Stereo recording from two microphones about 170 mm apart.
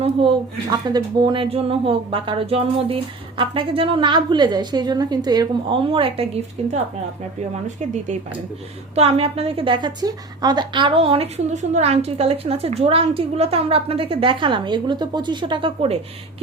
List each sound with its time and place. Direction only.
0.0 s a woman's voice: 30° right (ahead or behind)
9.0 s a woman's voice: 35° right (ahead or behind)